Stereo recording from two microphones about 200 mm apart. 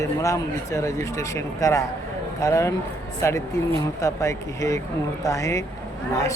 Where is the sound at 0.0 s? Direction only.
15° left (ahead or behind).